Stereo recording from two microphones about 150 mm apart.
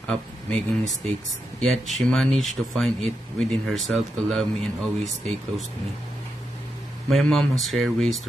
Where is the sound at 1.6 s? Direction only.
Centre (ahead or behind).